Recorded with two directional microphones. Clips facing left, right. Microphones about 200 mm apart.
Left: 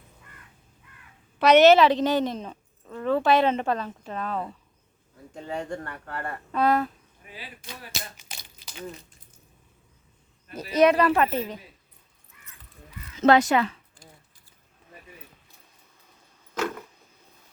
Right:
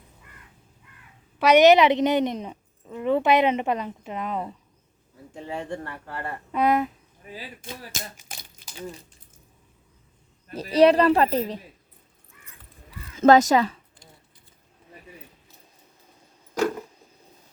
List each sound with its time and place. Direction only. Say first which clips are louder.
1.4 s a woman's voice: even; 10° right (ahead or behind)
5.6 s speech: right 1 dB; 20° right (ahead or behind)
6.1 s a woman's voice: even; 10° right (ahead or behind)
7.3 s speech: right 4 dB; 45° right (ahead or behind)
10.5 s speech: right 3 dB; 30° right (ahead or behind)
13.1 s speech: right 3 dB; 45° right (ahead or behind)